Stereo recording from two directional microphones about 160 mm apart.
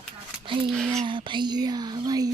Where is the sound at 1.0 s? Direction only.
30° right (ahead or behind).